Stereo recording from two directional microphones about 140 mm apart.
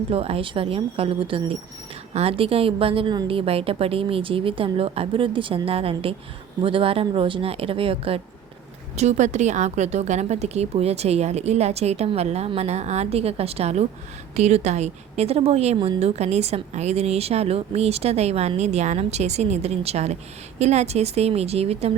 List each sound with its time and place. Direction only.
0.1 s a woman's voice: 45° right (ahead or behind)
9.0 s a woman's voice: 55° right (ahead or behind)